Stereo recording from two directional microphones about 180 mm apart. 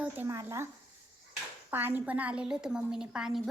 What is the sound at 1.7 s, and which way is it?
A child's voice, 10° right (ahead or behind).